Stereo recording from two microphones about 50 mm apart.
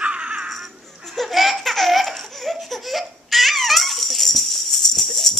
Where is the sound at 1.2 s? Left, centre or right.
Centre.